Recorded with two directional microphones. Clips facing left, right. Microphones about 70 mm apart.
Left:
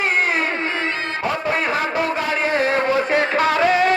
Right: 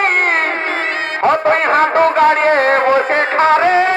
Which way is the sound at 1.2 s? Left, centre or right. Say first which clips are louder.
Right 10 dB; right.